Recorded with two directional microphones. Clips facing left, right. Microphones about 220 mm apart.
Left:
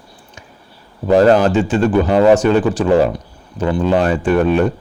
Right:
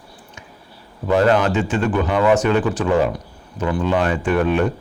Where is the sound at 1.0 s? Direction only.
35° left (ahead or behind).